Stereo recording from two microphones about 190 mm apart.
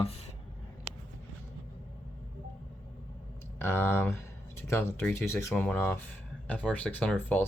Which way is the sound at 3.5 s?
15° left (ahead or behind).